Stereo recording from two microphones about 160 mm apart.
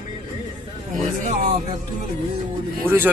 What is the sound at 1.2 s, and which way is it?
Speech, 50° right (ahead or behind).